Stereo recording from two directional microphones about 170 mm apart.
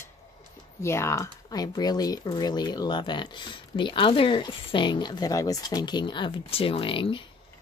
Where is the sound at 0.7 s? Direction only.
15° left (ahead or behind).